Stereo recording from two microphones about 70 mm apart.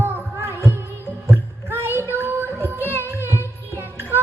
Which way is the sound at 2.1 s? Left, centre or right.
Right.